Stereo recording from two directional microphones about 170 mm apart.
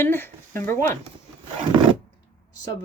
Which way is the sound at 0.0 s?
15° left (ahead or behind).